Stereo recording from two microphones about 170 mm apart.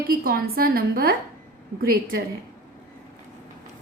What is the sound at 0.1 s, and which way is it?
A woman's voice, 60° right (ahead or behind).